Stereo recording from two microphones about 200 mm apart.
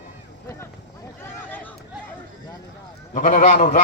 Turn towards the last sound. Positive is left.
turn(degrees=40)  # may be behind; listen again after turning